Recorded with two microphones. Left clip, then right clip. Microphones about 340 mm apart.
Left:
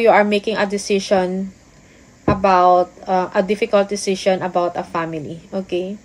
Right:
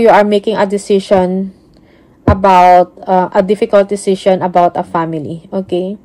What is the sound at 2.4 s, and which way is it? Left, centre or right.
Speech, right.